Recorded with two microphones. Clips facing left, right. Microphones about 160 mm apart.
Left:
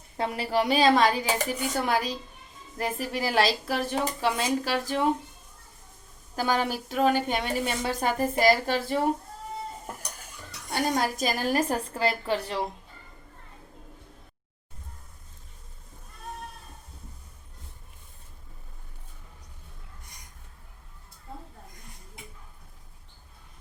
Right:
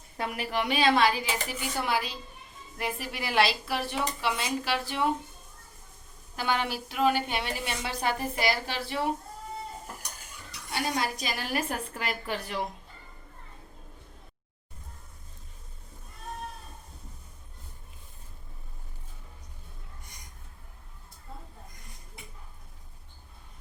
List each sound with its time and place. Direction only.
0.2 s a woman's voice: 30° left (ahead or behind)
6.3 s a woman's voice: 40° left (ahead or behind)
10.7 s a woman's voice: 45° left (ahead or behind); by 12.6 s 30° left (ahead or behind)